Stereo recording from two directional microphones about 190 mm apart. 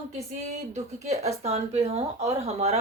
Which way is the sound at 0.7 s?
35° right (ahead or behind).